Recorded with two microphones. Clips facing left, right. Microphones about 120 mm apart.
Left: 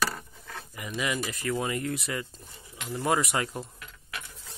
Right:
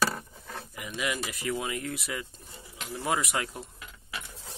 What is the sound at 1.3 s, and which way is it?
Speech, 15° right (ahead or behind).